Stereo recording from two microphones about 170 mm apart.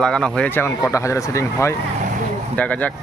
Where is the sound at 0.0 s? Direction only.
5° left (ahead or behind).